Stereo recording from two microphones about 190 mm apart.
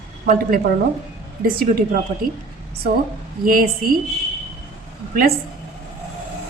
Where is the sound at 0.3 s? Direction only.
50° right (ahead or behind).